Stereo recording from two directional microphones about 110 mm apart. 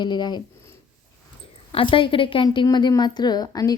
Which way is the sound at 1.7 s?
50° left (ahead or behind).